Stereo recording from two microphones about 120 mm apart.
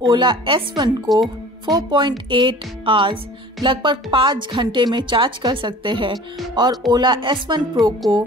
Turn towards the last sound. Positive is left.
turn(degrees=-35)  # may be behind; listen again after turning